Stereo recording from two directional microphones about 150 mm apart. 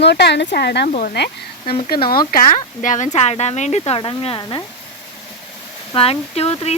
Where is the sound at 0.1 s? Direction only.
90° left; by 4.6 s 30° left (ahead or behind).